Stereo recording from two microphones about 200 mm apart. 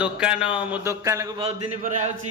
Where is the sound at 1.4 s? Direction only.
35° right (ahead or behind).